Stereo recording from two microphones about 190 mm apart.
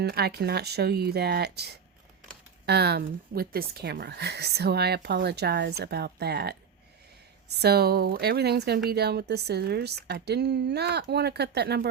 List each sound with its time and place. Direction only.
0.0 s a woman's voice: 60° right (ahead or behind)